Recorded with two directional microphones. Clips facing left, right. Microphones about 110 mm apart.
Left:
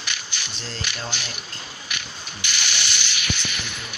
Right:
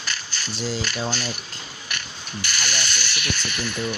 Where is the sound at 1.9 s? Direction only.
45° right (ahead or behind).